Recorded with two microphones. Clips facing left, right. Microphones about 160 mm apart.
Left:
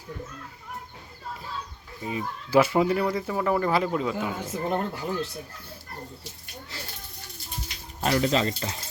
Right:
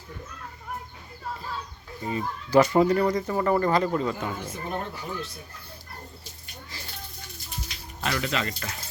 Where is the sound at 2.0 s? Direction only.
5° left (ahead or behind).